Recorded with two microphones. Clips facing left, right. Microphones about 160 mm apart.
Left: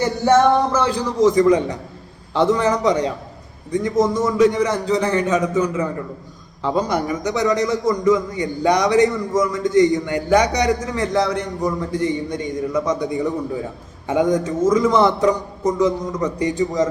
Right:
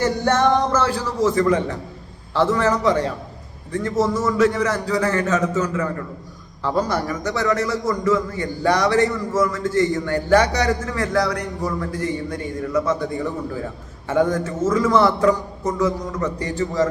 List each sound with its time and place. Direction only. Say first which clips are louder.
0.0 s a man's voice: left 3 dB; 10° left (ahead or behind)